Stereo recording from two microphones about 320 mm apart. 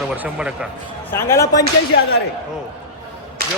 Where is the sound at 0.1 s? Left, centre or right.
Centre.